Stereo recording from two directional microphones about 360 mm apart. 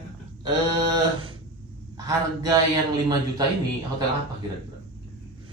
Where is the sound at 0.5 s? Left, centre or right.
Centre.